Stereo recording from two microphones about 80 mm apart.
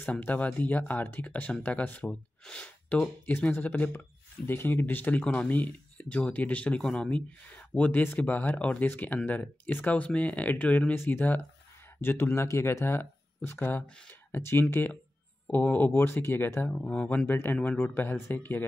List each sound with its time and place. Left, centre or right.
0.0 s speech: left
16.8 s speech: centre
17.3 s speech: left